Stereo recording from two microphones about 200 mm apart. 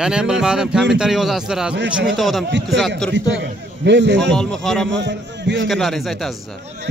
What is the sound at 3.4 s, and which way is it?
Speech, 60° right (ahead or behind).